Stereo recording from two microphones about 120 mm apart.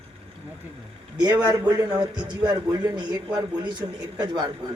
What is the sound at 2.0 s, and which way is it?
A man's voice, 40° right (ahead or behind).